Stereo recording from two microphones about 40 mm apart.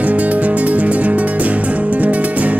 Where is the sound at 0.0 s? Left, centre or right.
Right.